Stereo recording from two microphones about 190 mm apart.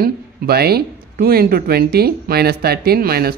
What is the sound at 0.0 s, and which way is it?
Speech, 55° right (ahead or behind).